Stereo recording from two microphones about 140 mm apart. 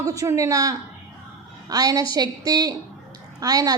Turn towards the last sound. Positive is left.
turn(degrees=-25)  # may be behind; listen again after turning